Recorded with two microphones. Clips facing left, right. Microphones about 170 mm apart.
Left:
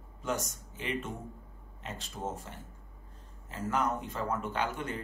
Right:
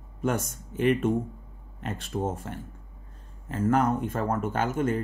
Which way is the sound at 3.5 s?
55° right (ahead or behind).